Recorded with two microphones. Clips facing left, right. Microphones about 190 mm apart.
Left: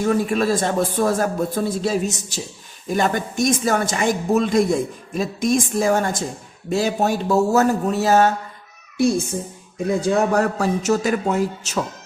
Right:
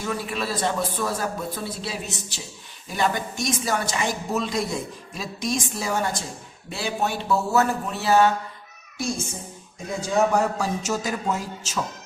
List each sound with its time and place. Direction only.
0.0 s a woman's voice: 50° left (ahead or behind)
9.8 s a man's voice: 60° left (ahead or behind)